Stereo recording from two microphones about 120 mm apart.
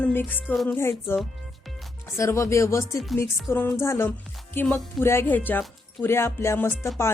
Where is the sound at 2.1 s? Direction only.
25° left (ahead or behind).